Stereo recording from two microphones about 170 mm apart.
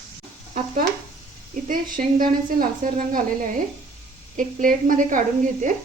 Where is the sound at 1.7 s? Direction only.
55° right (ahead or behind).